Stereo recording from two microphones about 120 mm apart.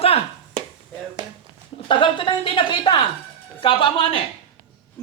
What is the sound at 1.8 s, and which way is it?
A woman's voice, 45° left (ahead or behind).